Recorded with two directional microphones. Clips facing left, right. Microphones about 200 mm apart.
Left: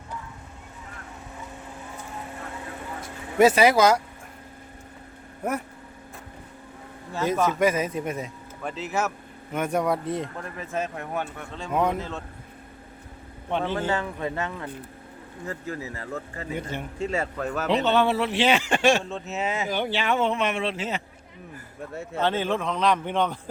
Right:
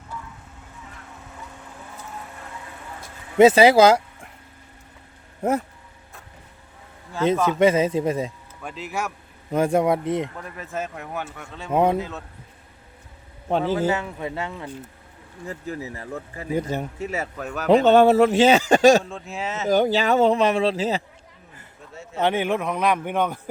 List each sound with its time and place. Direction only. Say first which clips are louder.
3.3 s speech: right 5 dB; 25° right (ahead or behind)
7.6 s speech: right 5 dB; 25° right (ahead or behind)
8.6 s speech: left 2 dB; centre (ahead or behind)
9.5 s speech: right 5 dB; 30° right (ahead or behind)
10.6 s speech: left 1 dB; 5° right (ahead or behind)
11.7 s speech: right 5 dB; 30° right (ahead or behind)
11.9 s a man's voice: right 4 dB; 10° right (ahead or behind)
13.6 s a man's voice: right 4 dB; 5° right (ahead or behind)
16.6 s speech: right 8 dB; 40° right (ahead or behind)
17.0 s speech: left 1 dB; 5° right (ahead or behind)
17.7 s a man's voice: right 8 dB; 45° right (ahead or behind)
19.0 s speech: left 2 dB; centre (ahead or behind)
19.6 s speech: right 12 dB; 40° right (ahead or behind)
22.2 s a man's voice: right 3 dB; 15° right (ahead or behind)